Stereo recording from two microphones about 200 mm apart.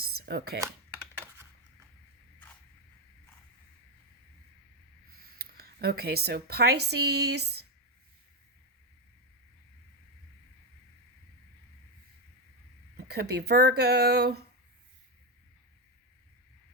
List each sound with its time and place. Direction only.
0.3 s speech: 50° right (ahead or behind)
5.4 s speech: 50° right (ahead or behind)
6.9 s a sound: 55° right (ahead or behind)
13.1 s speech: 55° right (ahead or behind)